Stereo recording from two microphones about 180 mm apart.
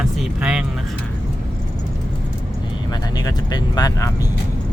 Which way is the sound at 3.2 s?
20° left (ahead or behind).